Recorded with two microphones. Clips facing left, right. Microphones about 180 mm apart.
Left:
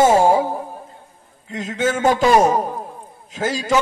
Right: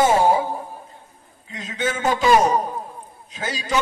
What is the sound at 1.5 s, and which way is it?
A man's voice, 50° left (ahead or behind).